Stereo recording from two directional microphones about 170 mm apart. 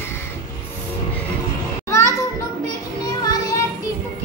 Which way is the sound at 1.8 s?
15° left (ahead or behind).